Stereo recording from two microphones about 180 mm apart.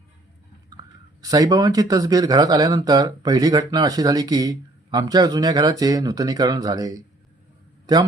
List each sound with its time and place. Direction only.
1.2 s speech: 20° right (ahead or behind)